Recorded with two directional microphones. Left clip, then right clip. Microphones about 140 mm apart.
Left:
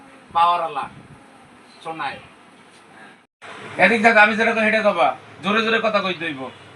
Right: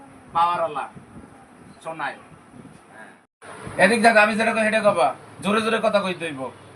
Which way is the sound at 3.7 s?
70° right (ahead or behind).